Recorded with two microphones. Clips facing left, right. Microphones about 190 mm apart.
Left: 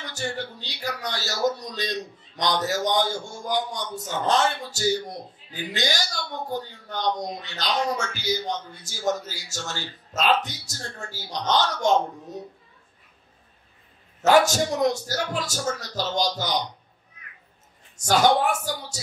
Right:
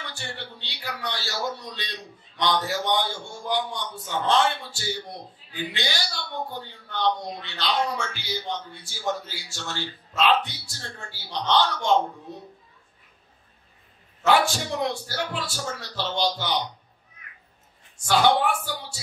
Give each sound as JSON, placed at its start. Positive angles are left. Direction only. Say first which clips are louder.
{"t": 0.0, "sound": "a man's voice", "louder": "left 6 dB", "side_deg": 45}
{"t": 14.2, "sound": "speech", "louder": "left 3 dB", "side_deg": 40}
{"t": 18.0, "sound": "speech", "louder": "left 1 dB", "side_deg": 40}